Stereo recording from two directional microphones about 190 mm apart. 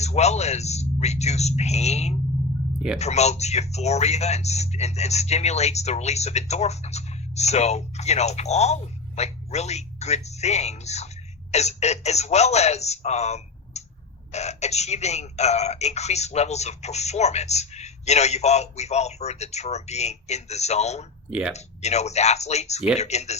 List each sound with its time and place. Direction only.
0.0 s speech: 35° left (ahead or behind)
21.2 s speech: 5° right (ahead or behind)
21.5 s speech: 35° left (ahead or behind)